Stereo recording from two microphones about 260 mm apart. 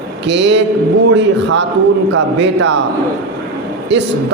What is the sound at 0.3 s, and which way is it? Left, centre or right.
A man's voice, right.